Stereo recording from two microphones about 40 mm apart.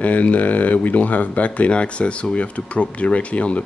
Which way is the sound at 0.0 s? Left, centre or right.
Left.